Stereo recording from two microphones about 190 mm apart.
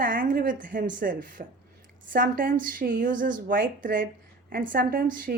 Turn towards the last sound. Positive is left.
turn(degrees=-50)  # may be behind; listen again after turning